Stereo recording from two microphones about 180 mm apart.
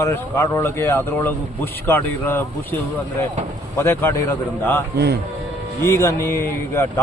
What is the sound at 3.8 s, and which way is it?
A man's voice, 10° left (ahead or behind).